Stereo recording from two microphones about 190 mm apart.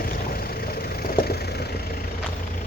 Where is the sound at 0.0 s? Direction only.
50° left (ahead or behind).